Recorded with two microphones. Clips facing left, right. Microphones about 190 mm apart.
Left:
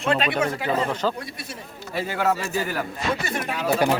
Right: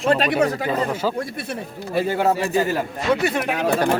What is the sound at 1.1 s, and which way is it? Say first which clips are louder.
Speech: right 8 dB; 50° right (ahead or behind).